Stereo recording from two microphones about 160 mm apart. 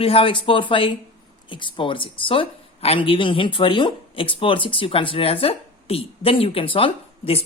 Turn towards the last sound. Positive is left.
turn(degrees=35)  # may be behind; listen again after turning